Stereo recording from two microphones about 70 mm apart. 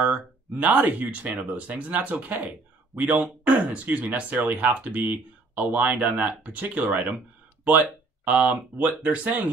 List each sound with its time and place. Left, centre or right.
0.0 s speech: right
8.3 s speech: right